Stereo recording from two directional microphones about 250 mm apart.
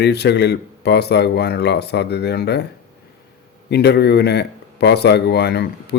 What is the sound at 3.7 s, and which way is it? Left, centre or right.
Speech, left.